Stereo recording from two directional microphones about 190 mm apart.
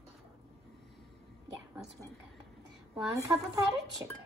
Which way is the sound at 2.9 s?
15° right (ahead or behind).